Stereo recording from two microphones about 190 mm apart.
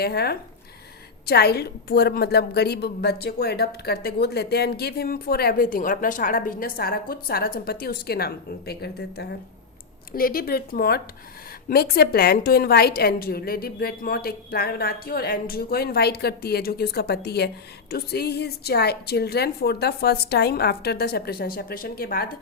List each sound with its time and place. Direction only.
0.0 s a woman's voice: 55° left (ahead or behind)